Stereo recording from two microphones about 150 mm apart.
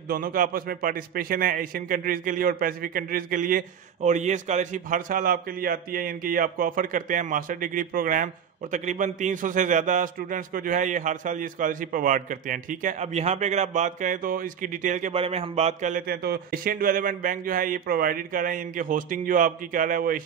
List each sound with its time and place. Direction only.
0.1 s a man's voice: 70° right (ahead or behind)
15.1 s speech: 40° right (ahead or behind)
16.1 s a man's voice: 90° right; by 20.2 s 65° right (ahead or behind)